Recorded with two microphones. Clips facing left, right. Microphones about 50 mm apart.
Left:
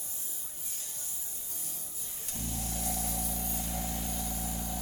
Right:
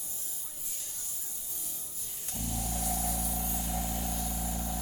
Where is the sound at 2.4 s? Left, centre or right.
Right.